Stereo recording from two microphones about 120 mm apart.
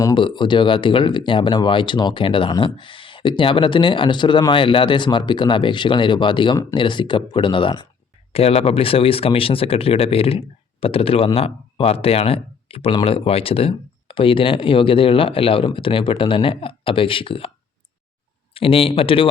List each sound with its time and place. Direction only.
0.1 s speech: 45° left (ahead or behind)
8.3 s speech: 55° left (ahead or behind)
18.5 s speech: 55° left (ahead or behind)